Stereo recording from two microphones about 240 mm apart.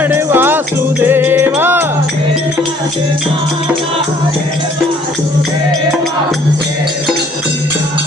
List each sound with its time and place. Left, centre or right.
0.0 s music: centre